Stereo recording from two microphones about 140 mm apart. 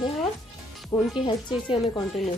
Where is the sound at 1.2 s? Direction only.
35° left (ahead or behind).